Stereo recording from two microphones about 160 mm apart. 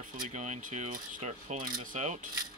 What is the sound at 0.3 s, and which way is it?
Speech, 45° right (ahead or behind).